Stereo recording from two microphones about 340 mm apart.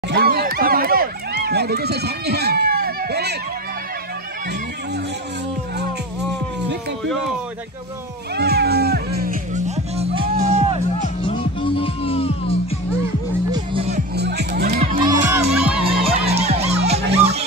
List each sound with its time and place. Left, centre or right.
0.1 s run: right
8.4 s music: right
11.2 s music: centre
13.5 s music: centre
15.0 s music: centre
15.8 s music: centre